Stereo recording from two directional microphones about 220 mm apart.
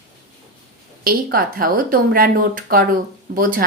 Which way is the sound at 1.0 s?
40° right (ahead or behind).